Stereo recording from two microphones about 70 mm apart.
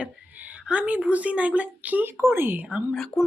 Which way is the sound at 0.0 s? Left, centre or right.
Right.